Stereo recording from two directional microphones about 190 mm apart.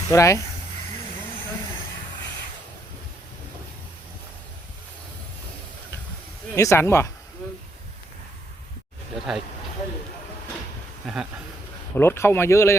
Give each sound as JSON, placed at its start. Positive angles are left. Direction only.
{"t": 0.1, "sound": "speech", "side_deg": 15}
{"t": 6.6, "sound": "speech", "side_deg": 15}
{"t": 11.0, "sound": "speech", "side_deg": 0}
{"t": 11.9, "sound": "speech", "side_deg": 10}